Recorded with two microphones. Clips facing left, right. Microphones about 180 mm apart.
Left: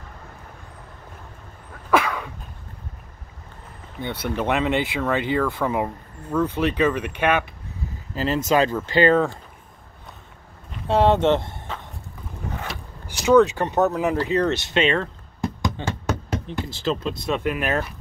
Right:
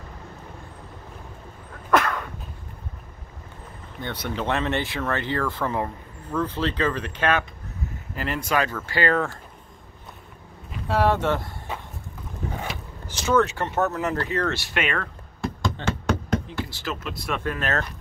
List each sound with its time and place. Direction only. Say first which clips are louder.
1.9 s a sound: left 1 dB; 5° left (ahead or behind)
4.2 s speech: left 3 dB; 15° left (ahead or behind)
8.5 s speech: left 4 dB; 20° left (ahead or behind)
10.9 s speech: left 4 dB; 25° left (ahead or behind)
13.0 s speech: left 6 dB; 15° left (ahead or behind)